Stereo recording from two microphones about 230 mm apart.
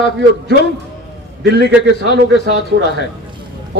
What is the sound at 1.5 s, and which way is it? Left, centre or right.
Speech, right.